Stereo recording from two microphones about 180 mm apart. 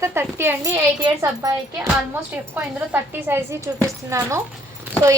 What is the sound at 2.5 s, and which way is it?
A woman's voice, 10° right (ahead or behind).